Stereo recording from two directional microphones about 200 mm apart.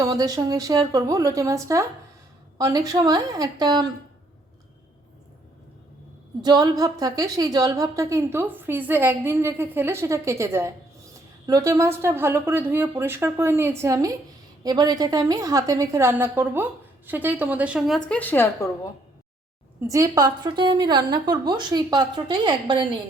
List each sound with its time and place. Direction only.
0.0 s a woman's voice: 20° right (ahead or behind)
6.4 s a woman's voice: 20° right (ahead or behind); by 18.7 s 10° left (ahead or behind)
19.9 s a woman's voice: 15° right (ahead or behind)